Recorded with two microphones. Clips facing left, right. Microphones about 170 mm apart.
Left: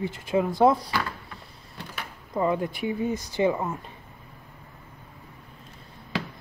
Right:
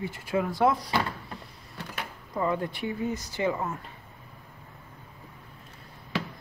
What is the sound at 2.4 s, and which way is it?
Speech, 15° left (ahead or behind).